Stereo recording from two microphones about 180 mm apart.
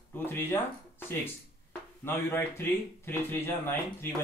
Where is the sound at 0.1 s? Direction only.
10° left (ahead or behind).